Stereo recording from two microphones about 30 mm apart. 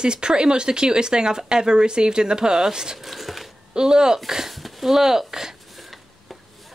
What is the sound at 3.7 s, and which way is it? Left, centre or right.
Speech, right.